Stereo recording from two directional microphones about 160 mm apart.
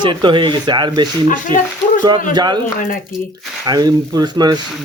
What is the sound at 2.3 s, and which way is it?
Speech, 25° right (ahead or behind).